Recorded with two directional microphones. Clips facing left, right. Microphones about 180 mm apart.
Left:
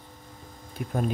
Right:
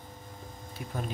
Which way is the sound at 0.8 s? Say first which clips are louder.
Left 7 dB; 55° left (ahead or behind).